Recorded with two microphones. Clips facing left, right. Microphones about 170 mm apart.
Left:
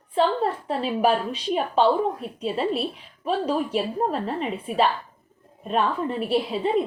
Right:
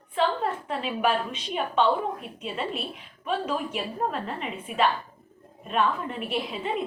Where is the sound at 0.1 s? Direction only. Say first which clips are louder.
Left 4 dB; 35° left (ahead or behind).